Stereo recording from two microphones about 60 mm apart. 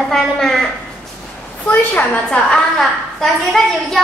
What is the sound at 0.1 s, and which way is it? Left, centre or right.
Speech, centre.